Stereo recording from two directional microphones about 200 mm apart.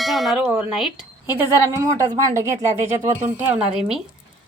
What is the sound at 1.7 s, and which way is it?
A woman's voice, 15° right (ahead or behind).